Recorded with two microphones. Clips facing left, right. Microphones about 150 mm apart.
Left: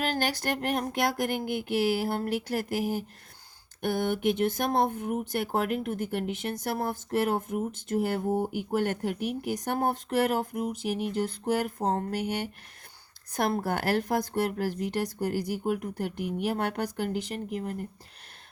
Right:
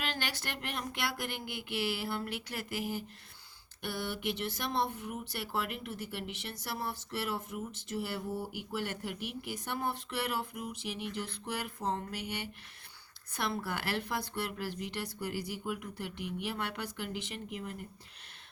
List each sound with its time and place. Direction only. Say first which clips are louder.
0.0 s speech: left 9 dB; 40° left (ahead or behind)